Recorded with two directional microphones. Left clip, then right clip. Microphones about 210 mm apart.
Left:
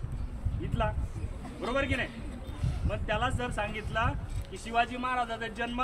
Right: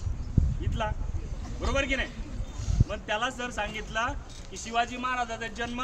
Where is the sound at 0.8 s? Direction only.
20° right (ahead or behind).